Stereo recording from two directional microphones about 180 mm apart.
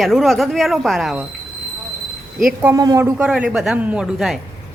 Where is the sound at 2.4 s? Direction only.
5° right (ahead or behind).